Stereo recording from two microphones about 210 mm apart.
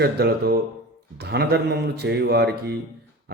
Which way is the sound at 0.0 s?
50° right (ahead or behind).